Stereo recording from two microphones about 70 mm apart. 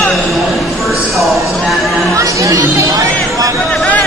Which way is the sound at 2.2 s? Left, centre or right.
Right.